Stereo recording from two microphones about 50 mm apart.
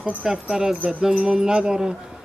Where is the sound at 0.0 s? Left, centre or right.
Right.